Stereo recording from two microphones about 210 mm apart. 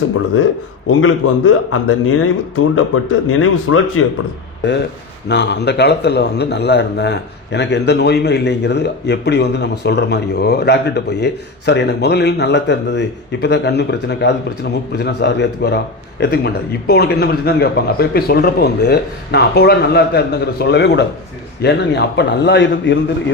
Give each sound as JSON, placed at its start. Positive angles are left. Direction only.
{"t": 0.9, "sound": "speech", "side_deg": 80}
{"t": 5.3, "sound": "a man's voice", "side_deg": 55}